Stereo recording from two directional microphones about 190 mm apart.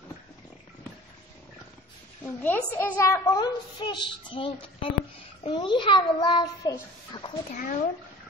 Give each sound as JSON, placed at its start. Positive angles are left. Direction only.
{"t": 2.2, "sound": "a woman's voice", "side_deg": 10}
{"t": 7.5, "sound": "speech", "side_deg": 45}